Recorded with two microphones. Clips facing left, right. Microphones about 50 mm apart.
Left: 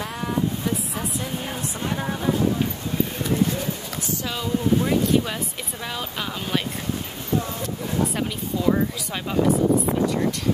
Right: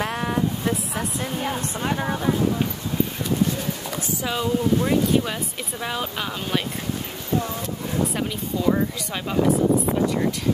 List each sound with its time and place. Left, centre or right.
0.0 s vehicle: right
2.0 s speech: centre
4.2 s speech: centre
8.6 s speech: centre